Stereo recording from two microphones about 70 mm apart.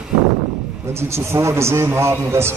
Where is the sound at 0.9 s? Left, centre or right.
Right.